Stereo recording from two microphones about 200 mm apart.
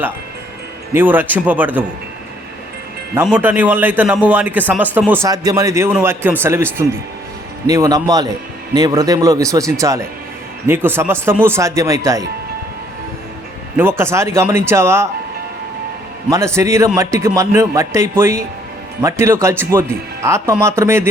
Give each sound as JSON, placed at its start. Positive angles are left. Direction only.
{"t": 0.9, "sound": "a man's voice", "side_deg": -10}
{"t": 3.2, "sound": "a man's voice", "side_deg": -10}
{"t": 13.7, "sound": "a man's voice", "side_deg": -10}
{"t": 16.3, "sound": "a man's voice", "side_deg": -15}